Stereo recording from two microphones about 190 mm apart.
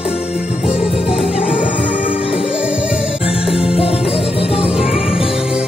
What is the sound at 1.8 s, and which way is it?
Music, 40° left (ahead or behind).